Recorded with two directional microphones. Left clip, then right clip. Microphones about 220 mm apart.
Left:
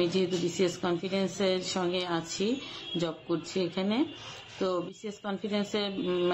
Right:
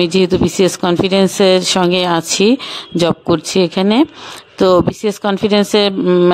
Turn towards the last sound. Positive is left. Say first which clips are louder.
# right 18 dB
turn(degrees=-45)  # may be behind; listen again after turning